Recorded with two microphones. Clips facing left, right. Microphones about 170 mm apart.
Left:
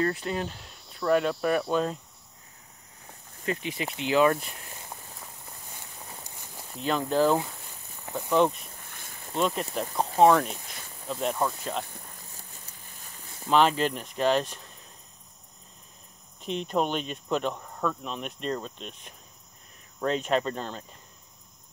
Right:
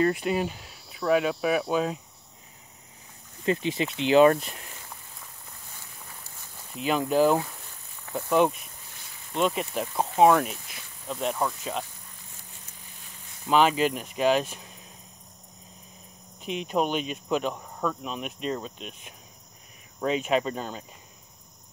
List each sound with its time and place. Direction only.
0.0 s speech: 15° right (ahead or behind)
3.4 s speech: 25° right (ahead or behind)
6.8 s speech: 10° right (ahead or behind)
8.8 s a sound: 50° left (ahead or behind)
9.4 s speech: centre (ahead or behind)
13.5 s speech: 5° right (ahead or behind)
16.3 s speech: 5° right (ahead or behind)